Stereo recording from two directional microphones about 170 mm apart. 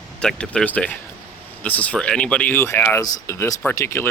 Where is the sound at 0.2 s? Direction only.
5° left (ahead or behind).